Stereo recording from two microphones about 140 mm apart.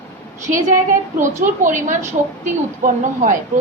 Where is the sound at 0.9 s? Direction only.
65° right (ahead or behind).